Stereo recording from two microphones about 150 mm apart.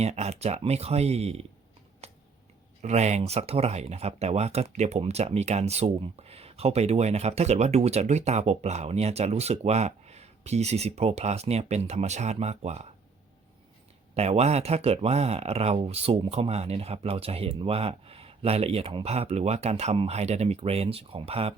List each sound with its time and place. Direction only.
0.0 s speech: 45° right (ahead or behind)
2.0 s a sound: 45° right (ahead or behind)
2.8 s speech: 50° right (ahead or behind)
14.2 s speech: 45° right (ahead or behind)